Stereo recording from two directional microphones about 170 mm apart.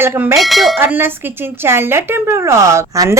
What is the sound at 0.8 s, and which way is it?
A woman's voice, 10° right (ahead or behind).